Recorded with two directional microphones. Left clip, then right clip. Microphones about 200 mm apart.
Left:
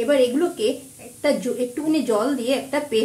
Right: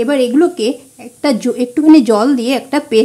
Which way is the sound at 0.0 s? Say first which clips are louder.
Right 6 dB; 55° right (ahead or behind).